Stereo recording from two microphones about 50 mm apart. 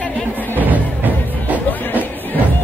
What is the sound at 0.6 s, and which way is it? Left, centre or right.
Music, right.